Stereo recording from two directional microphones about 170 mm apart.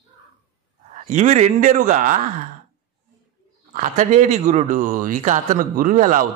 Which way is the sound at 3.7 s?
45° right (ahead or behind).